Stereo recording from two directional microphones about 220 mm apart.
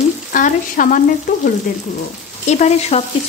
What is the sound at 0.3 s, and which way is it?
Speech, 35° left (ahead or behind).